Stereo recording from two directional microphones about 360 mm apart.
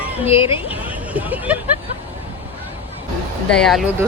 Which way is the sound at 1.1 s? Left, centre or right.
Centre.